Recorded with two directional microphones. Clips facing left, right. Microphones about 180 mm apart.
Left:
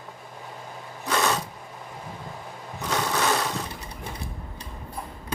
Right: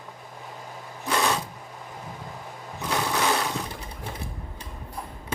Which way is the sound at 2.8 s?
5° right (ahead or behind).